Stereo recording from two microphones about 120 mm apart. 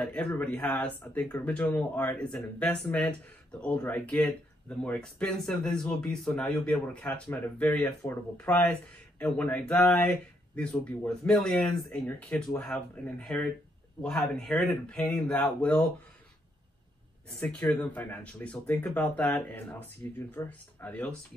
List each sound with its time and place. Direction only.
0.0 s speech: 10° left (ahead or behind)
17.4 s speech: 15° left (ahead or behind)